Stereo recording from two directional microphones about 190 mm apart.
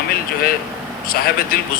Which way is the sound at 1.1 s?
50° left (ahead or behind).